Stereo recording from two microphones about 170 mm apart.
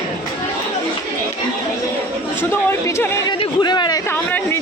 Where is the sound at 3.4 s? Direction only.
25° left (ahead or behind).